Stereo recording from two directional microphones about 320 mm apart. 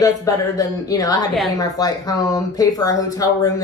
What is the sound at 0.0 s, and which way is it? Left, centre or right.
Speech, centre.